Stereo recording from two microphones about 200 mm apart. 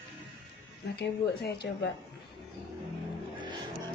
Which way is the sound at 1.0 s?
55° left (ahead or behind).